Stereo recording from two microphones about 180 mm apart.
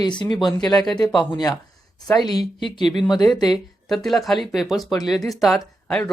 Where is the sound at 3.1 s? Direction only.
25° left (ahead or behind).